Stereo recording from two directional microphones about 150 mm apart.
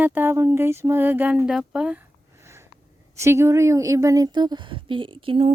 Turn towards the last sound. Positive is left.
turn(degrees=-35)  # may be behind; listen again after turning